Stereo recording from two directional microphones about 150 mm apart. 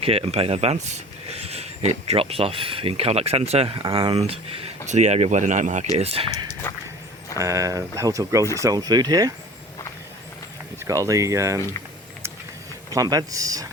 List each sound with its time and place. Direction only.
0.0 s speech: 40° right (ahead or behind)
6.0 s speech: 40° right (ahead or behind)
7.3 s speech: 20° right (ahead or behind)
10.8 s speech: 20° right (ahead or behind)
12.9 s speech: 25° right (ahead or behind)